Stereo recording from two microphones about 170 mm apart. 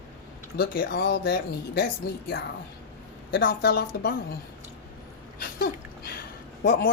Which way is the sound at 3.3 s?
65° left (ahead or behind).